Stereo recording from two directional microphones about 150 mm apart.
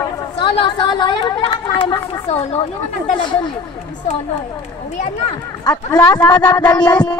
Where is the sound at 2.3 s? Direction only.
45° left (ahead or behind).